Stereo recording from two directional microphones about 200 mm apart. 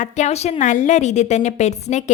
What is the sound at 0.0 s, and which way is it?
A woman's voice, 35° left (ahead or behind).